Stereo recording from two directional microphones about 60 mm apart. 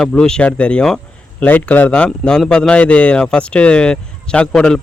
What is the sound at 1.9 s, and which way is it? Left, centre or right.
Speech, centre.